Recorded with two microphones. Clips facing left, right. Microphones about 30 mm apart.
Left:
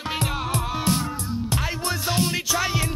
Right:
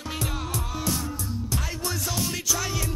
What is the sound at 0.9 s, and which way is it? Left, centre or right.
Music, left.